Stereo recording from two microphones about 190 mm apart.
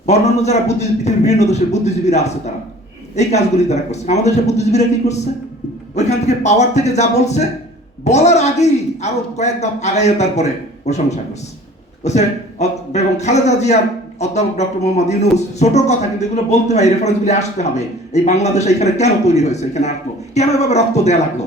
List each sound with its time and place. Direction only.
0.0 s speech: 35° left (ahead or behind)